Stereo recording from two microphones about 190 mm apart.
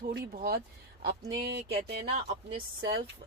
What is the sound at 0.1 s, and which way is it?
Speech, 55° right (ahead or behind).